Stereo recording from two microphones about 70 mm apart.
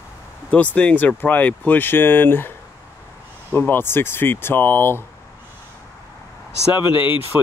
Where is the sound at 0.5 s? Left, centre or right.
Centre.